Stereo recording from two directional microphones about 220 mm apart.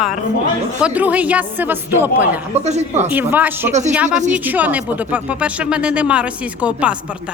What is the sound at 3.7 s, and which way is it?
Speech, 30° right (ahead or behind).